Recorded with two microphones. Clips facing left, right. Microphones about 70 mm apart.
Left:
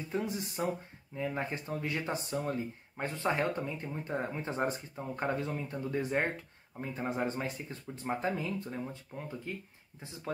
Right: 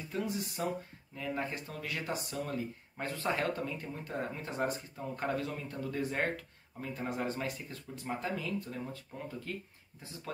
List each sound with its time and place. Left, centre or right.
0.1 s speech: left